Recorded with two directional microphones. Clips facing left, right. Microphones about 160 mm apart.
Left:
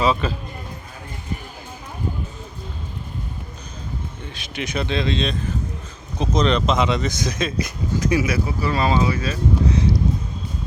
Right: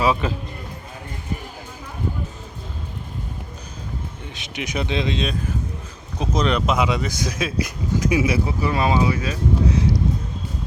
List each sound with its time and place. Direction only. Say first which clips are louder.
0.0 s speech: even; 15° right (ahead or behind)
4.4 s speech: left 1 dB; 20° right (ahead or behind)
8.2 s speech: right 1 dB; 25° right (ahead or behind); by 9.8 s 10° right (ahead or behind)